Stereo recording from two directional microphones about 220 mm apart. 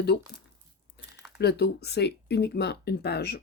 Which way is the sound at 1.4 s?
45° left (ahead or behind).